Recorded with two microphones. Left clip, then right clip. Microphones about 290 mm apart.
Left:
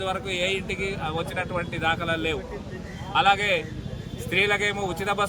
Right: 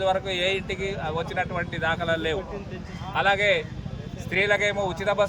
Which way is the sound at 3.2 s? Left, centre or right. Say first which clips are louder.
Even; left.